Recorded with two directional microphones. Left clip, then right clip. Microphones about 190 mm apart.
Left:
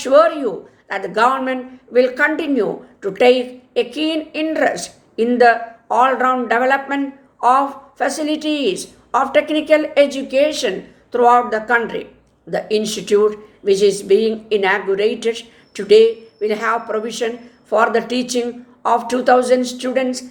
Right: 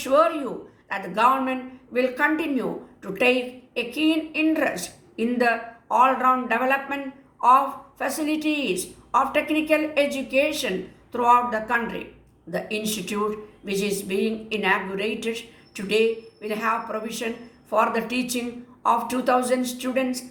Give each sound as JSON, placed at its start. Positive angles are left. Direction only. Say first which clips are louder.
{"t": 0.0, "sound": "a woman's voice", "louder": "left 7 dB", "side_deg": 40}